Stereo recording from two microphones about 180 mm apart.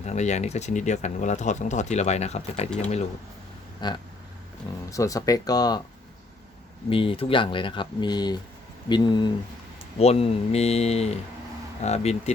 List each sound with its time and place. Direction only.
0.0 s speech: 40° left (ahead or behind)
3.8 s a sound: 25° left (ahead or behind)
4.9 s speech: 20° left (ahead or behind)
6.9 s speech: 30° left (ahead or behind)
10.0 s speech: 35° left (ahead or behind)